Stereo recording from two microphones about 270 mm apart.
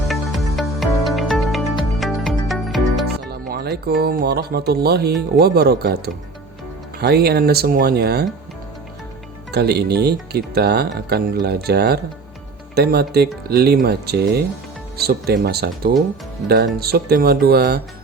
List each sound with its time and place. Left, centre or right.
0.1 s music: centre
3.2 s speech: right
7.0 s speech: right
9.5 s speech: right